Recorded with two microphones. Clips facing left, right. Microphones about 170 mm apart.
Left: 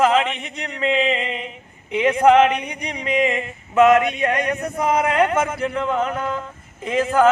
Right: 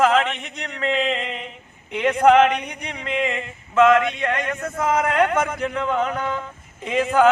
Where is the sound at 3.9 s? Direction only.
15° left (ahead or behind).